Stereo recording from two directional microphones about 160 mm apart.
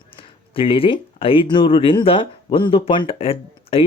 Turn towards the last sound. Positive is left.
turn(degrees=35)  # may be behind; listen again after turning